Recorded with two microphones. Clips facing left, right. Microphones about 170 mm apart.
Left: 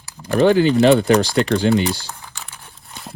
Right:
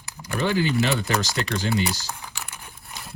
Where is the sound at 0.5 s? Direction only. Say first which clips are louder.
Left 9 dB; 60° left (ahead or behind).